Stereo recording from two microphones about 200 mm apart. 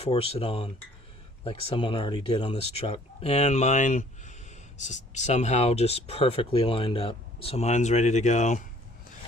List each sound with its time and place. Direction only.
0.0 s speech: 30° left (ahead or behind)